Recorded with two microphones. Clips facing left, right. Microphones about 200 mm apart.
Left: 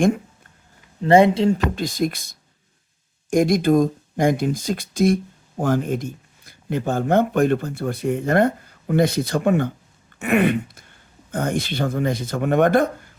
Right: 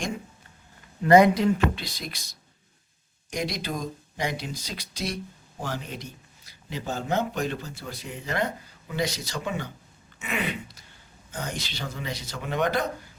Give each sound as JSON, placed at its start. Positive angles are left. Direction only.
{"t": 1.0, "sound": "a woman's voice", "side_deg": 25}
{"t": 1.7, "sound": "speech", "side_deg": 50}
{"t": 10.2, "sound": "a sound", "side_deg": 55}
{"t": 11.3, "sound": "speech", "side_deg": 55}